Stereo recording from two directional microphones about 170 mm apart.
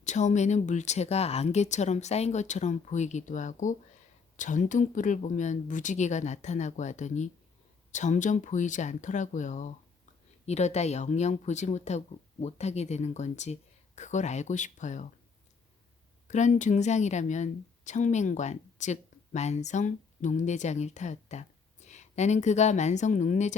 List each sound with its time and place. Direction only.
0.0 s speech: 45° left (ahead or behind)
16.2 s a woman's voice: 45° left (ahead or behind)